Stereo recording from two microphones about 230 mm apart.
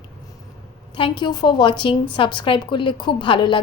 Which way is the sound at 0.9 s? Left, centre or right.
Left.